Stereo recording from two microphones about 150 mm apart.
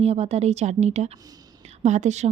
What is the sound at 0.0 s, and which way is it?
A woman's voice, 45° right (ahead or behind).